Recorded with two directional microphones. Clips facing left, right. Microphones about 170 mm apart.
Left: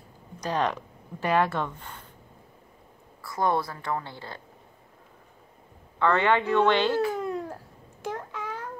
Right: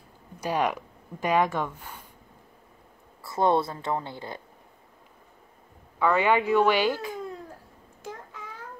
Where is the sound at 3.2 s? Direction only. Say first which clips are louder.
Right 3 dB; 25° right (ahead or behind).